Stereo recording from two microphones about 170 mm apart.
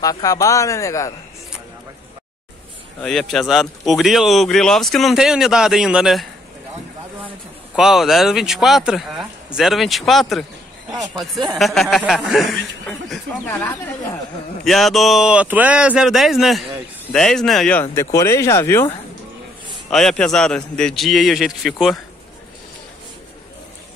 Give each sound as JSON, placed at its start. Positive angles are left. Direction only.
{"t": 0.0, "sound": "speech", "side_deg": 20}
{"t": 3.0, "sound": "speech", "side_deg": 0}
{"t": 7.7, "sound": "speech", "side_deg": 0}
{"t": 11.5, "sound": "speech", "side_deg": 0}
{"t": 13.5, "sound": "speech", "side_deg": 15}
{"t": 14.6, "sound": "speech", "side_deg": 0}
{"t": 19.9, "sound": "speech", "side_deg": 5}